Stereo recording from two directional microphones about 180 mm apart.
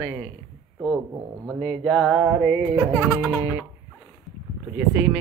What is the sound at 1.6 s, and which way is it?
Speech, 5° left (ahead or behind).